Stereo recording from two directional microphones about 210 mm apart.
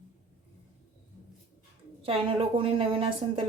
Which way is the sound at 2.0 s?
25° right (ahead or behind).